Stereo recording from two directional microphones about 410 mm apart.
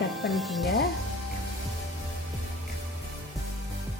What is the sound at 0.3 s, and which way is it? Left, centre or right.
Speech, centre.